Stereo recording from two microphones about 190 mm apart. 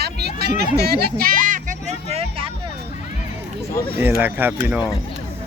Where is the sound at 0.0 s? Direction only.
60° right (ahead or behind).